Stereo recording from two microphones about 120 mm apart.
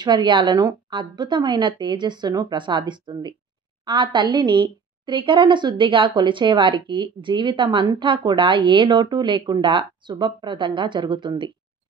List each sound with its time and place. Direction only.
0.0 s a woman's voice: 40° right (ahead or behind)